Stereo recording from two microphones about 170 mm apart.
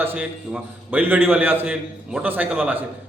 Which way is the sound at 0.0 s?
10° right (ahead or behind).